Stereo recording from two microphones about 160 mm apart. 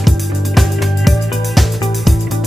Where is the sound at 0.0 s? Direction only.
Centre (ahead or behind).